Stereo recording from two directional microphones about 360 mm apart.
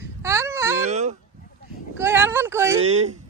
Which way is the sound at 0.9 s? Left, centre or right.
Centre.